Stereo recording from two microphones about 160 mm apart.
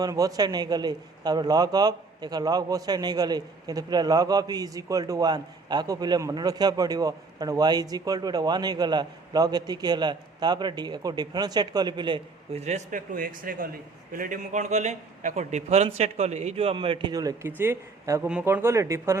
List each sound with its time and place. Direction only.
0.0 s a man's voice: 20° right (ahead or behind)
12.5 s a man's voice: 45° right (ahead or behind); by 19.2 s 15° right (ahead or behind)